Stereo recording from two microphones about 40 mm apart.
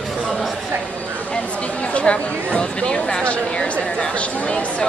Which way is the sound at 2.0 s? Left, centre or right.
Left.